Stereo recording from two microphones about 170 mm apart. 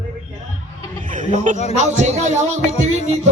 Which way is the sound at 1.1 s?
50° right (ahead or behind).